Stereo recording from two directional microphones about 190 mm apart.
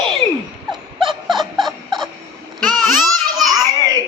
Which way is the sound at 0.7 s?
Centre (ahead or behind).